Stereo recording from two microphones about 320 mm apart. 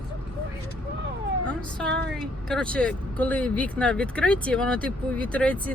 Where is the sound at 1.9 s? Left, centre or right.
Right.